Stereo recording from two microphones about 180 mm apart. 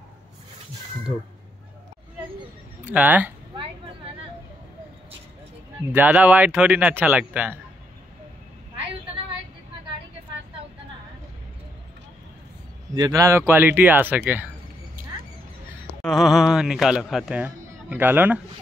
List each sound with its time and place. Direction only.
2.8 s speech: 10° right (ahead or behind)
5.9 s speech: 10° right (ahead or behind)
12.9 s speech: 20° right (ahead or behind)
16.0 s speech: centre (ahead or behind)